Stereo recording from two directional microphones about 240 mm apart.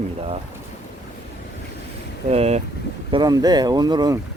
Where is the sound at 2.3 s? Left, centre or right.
Right.